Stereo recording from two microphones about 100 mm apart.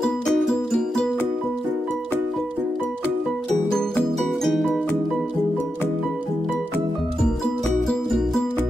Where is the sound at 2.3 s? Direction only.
Centre (ahead or behind).